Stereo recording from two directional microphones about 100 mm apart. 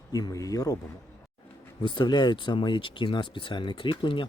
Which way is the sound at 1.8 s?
50° left (ahead or behind).